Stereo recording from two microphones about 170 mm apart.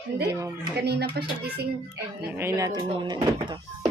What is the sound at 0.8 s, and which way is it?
Speech, 75° right (ahead or behind).